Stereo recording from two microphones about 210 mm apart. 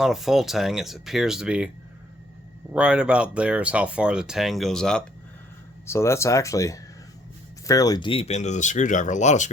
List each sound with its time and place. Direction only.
0.0 s speech: centre (ahead or behind)
2.7 s speech: 5° right (ahead or behind); by 9.5 s 35° left (ahead or behind)